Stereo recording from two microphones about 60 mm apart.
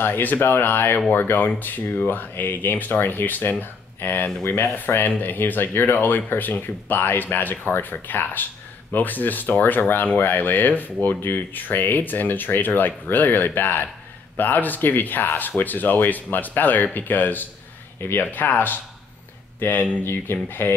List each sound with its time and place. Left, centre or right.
0.0 s speech: left